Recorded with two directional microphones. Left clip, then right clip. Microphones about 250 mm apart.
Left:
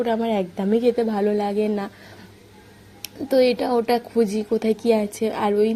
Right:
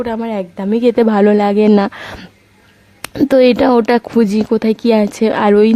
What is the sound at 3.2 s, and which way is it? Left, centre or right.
A woman's voice, right.